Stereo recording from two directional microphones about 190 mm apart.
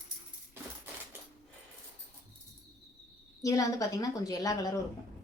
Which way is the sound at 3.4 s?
15° left (ahead or behind).